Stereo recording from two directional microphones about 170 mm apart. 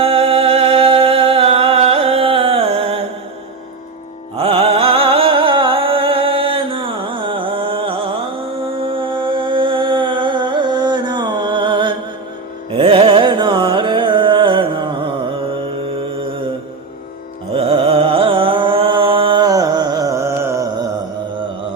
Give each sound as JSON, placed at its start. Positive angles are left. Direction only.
{"t": 0.0, "sound": "music", "side_deg": -35}
{"t": 4.4, "sound": "music", "side_deg": -35}
{"t": 12.7, "sound": "carnatic music", "side_deg": -30}
{"t": 17.6, "sound": "music", "side_deg": -35}